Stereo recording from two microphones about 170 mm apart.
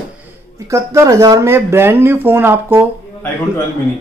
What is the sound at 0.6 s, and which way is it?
Speech, 15° right (ahead or behind).